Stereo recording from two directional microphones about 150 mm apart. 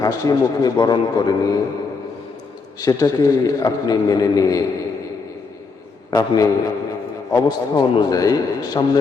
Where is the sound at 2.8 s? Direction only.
25° left (ahead or behind).